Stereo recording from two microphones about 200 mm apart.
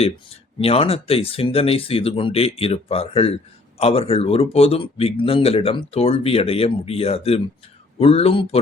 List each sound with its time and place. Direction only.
0.6 s speech: 30° left (ahead or behind)